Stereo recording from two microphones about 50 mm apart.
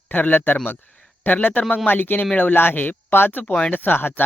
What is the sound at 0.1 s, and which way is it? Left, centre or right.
Speech, left.